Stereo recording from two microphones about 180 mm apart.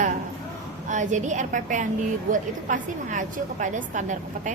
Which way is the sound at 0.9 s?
40° right (ahead or behind).